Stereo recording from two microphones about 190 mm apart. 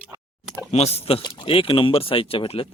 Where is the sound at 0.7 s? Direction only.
35° left (ahead or behind).